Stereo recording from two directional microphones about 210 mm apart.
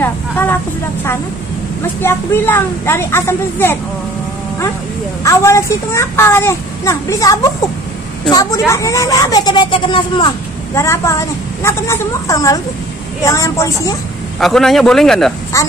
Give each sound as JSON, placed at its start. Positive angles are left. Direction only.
{"t": 0.0, "sound": "speech", "side_deg": 10}
{"t": 2.0, "sound": "speech", "side_deg": 10}
{"t": 5.2, "sound": "speech", "side_deg": 15}
{"t": 14.4, "sound": "a man's voice", "side_deg": 0}